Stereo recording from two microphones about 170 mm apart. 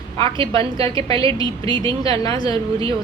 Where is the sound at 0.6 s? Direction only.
35° right (ahead or behind).